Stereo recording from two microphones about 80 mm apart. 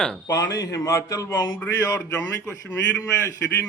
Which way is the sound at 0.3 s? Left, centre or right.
Left.